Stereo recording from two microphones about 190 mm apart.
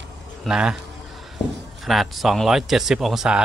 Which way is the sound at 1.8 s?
Centre (ahead or behind).